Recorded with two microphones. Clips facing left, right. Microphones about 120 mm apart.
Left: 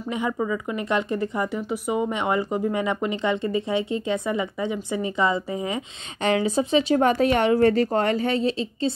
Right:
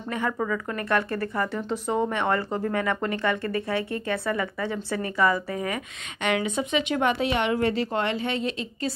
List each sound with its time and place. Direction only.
0.1 s a woman's voice: 15° left (ahead or behind)
6.2 s speech: 35° left (ahead or behind)